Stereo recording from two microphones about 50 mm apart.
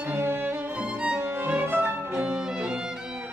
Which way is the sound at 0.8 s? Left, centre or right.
Right.